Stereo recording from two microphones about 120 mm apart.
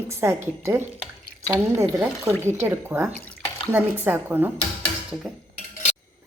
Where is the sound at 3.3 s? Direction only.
15° left (ahead or behind).